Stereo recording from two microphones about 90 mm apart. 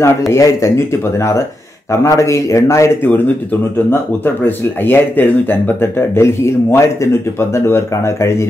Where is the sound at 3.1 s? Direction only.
20° left (ahead or behind).